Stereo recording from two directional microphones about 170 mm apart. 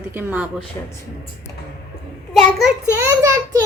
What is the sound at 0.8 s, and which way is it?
Speech, 15° left (ahead or behind).